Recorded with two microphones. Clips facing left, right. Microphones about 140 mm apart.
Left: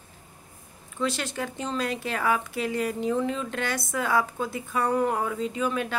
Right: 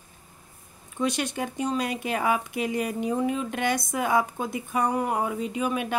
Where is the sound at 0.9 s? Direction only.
15° right (ahead or behind).